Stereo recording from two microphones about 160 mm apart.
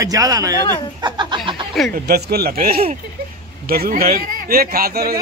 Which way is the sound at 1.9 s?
75° right (ahead or behind).